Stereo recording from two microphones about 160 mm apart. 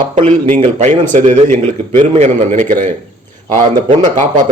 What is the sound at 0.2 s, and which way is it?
A man's voice, 45° right (ahead or behind).